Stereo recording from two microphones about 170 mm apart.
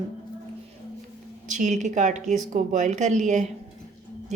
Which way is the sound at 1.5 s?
45° right (ahead or behind).